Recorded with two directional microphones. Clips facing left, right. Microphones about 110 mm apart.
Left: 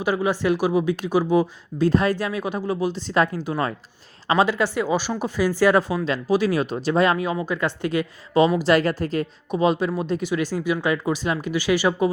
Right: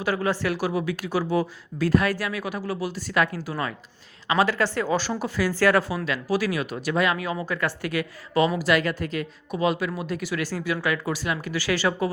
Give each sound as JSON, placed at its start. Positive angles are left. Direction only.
{"t": 0.0, "sound": "speech", "side_deg": 15}
{"t": 8.7, "sound": "a woman's voice", "side_deg": 35}
{"t": 9.5, "sound": "speech", "side_deg": 25}